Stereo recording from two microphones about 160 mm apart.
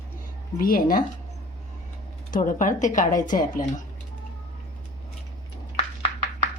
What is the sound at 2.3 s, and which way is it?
Speech, 55° left (ahead or behind).